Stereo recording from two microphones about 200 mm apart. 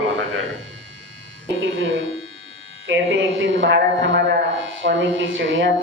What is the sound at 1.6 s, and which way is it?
Speech, 75° right (ahead or behind).